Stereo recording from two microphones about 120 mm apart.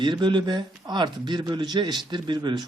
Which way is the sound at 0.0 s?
40° right (ahead or behind).